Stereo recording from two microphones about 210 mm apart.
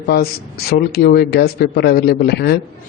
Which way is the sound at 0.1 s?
45° left (ahead or behind).